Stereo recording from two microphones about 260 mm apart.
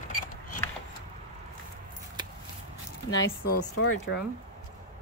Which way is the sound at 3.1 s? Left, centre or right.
Left.